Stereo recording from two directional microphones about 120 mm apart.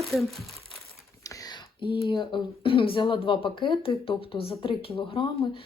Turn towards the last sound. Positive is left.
turn(degrees=50)  # may be behind; listen again after turning